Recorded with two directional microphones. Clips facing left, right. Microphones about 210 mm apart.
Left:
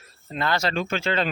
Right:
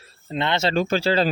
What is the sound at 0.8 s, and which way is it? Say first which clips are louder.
Speech: right 5 dB; 35° right (ahead or behind).